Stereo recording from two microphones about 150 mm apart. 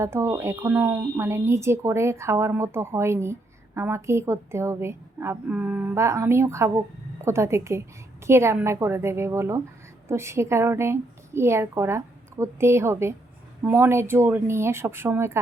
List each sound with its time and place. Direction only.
0.0 s a woman's voice: 20° right (ahead or behind)